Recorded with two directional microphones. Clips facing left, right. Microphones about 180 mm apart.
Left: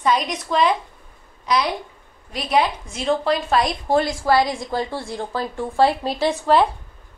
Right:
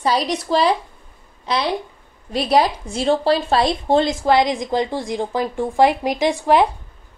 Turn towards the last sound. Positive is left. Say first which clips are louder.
# right 2 dB
turn(degrees=-15)  # may be behind; listen again after turning